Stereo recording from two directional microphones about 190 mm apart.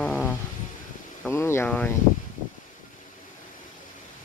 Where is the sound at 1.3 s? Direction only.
15° left (ahead or behind).